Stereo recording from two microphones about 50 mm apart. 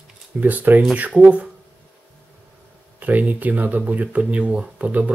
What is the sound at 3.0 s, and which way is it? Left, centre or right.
Speech, right.